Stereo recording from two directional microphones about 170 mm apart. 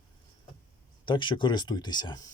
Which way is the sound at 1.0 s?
30° left (ahead or behind).